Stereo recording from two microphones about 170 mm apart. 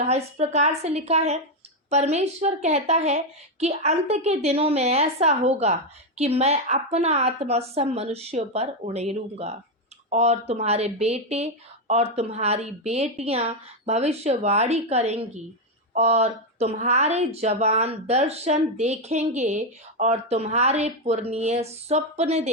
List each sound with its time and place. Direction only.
0.0 s speech: 40° right (ahead or behind)